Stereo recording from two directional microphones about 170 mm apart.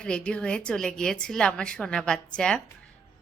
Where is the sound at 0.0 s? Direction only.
5° left (ahead or behind).